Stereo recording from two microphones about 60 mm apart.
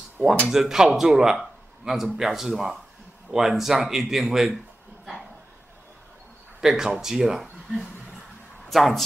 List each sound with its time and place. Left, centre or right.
0.5 s a man's voice: centre
6.6 s speech: centre
8.6 s speech: centre